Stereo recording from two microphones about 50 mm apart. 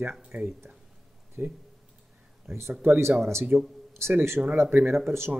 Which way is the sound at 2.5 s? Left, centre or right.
Right.